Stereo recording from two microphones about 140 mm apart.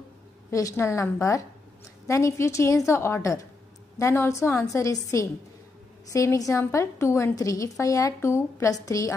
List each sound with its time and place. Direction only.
0.5 s a woman's voice: 25° left (ahead or behind)